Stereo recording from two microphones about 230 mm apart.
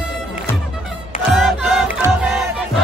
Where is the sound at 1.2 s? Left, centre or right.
Centre.